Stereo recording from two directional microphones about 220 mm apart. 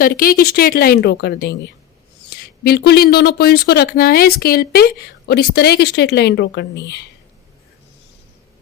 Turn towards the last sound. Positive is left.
turn(degrees=50)  # may be behind; listen again after turning